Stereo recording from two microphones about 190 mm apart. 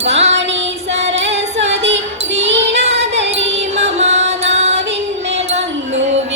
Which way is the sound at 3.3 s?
35° right (ahead or behind).